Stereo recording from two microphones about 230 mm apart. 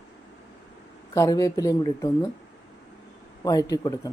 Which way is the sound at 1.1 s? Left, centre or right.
Centre.